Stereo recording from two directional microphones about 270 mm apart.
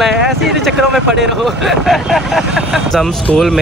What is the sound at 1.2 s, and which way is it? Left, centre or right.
Speech, centre.